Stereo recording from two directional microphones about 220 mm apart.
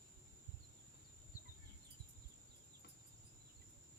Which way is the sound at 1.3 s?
40° left (ahead or behind).